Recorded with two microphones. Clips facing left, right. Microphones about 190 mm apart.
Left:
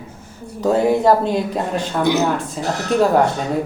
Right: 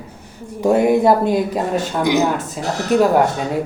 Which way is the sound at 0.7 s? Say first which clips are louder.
Right 1 dB; 10° right (ahead or behind).